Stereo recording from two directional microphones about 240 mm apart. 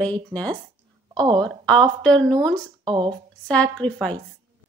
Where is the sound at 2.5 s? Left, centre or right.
Centre.